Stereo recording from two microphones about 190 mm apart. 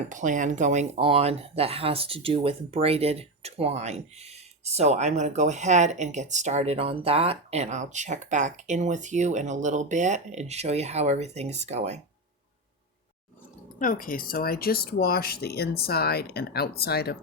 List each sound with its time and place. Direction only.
0.1 s speech: 40° right (ahead or behind)
13.7 s speech: 45° left (ahead or behind)